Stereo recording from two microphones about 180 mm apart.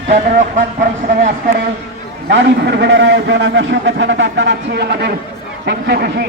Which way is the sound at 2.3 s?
80° right.